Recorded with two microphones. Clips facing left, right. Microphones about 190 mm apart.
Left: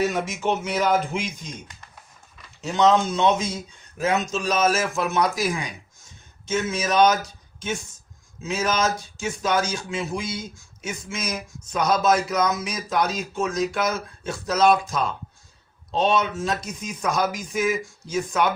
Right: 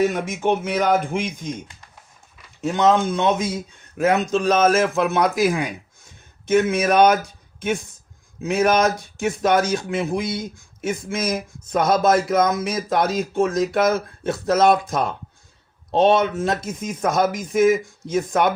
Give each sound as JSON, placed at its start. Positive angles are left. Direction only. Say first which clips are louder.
{"t": 0.0, "sound": "speech", "louder": "right 3 dB", "side_deg": -55}
{"t": 2.6, "sound": "speech", "louder": "right 1 dB", "side_deg": -55}